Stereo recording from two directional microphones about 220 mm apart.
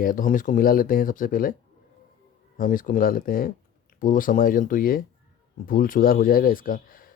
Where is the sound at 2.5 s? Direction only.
40° left (ahead or behind).